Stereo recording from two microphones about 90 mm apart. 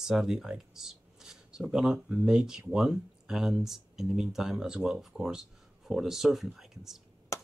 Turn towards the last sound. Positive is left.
turn(degrees=35)  # may be behind; listen again after turning